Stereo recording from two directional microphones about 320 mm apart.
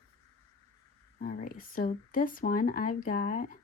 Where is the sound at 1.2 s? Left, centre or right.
Left.